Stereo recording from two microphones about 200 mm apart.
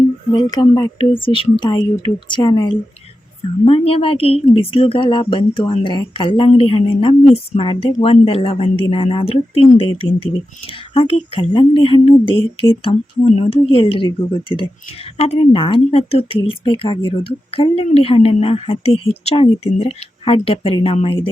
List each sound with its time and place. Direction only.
0.3 s a woman's voice: 20° left (ahead or behind)